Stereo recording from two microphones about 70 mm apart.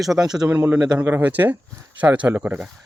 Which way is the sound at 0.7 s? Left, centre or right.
Centre.